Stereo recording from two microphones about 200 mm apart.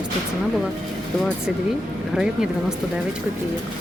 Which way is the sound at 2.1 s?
5° right (ahead or behind).